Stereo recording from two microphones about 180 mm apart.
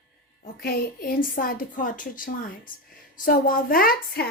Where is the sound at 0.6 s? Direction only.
60° left (ahead or behind).